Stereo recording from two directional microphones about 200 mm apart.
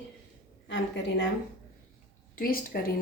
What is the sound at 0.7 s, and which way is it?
Speech, 60° left (ahead or behind).